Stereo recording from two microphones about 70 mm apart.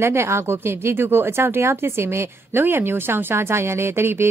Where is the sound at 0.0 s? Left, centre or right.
Right.